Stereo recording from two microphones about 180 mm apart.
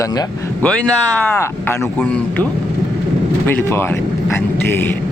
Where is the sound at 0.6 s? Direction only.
5° left (ahead or behind).